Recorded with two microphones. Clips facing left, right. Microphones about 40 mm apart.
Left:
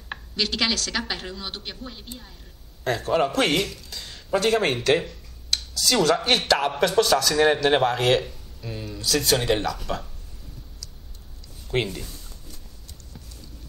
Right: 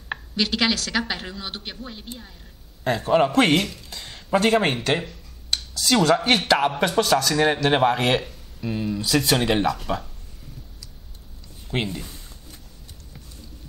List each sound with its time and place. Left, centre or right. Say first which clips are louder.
0.1 s a woman's voice: right 3 dB; centre
3.7 s a woman's voice: right 1 dB; right
11.7 s speech: left 1 dB; centre